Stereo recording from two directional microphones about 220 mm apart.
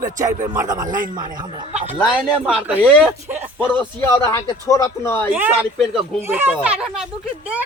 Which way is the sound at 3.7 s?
10° left (ahead or behind).